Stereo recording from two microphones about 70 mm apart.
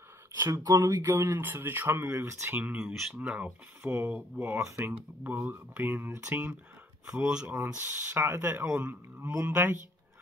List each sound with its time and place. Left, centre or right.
0.7 s speech: right
1.0 s speech: right
2.8 s speech: centre
3.2 s speech: centre
3.4 s speech: right
4.6 s speech: right
5.3 s speech: right
7.1 s speech: centre
7.4 s speech: right